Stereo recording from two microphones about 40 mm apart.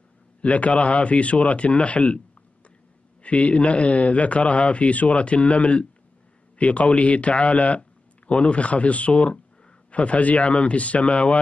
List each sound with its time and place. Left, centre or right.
0.4 s a man's voice: left
3.2 s a man's voice: left